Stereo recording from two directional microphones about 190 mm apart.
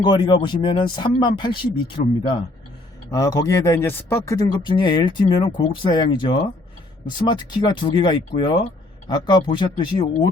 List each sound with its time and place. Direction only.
0.0 s speech: 25° left (ahead or behind)
3.1 s speech: 20° left (ahead or behind)